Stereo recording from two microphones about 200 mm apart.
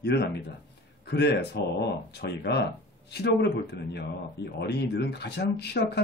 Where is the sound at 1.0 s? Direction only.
55° left (ahead or behind).